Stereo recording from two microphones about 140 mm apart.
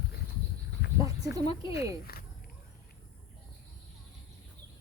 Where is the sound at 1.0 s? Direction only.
25° right (ahead or behind).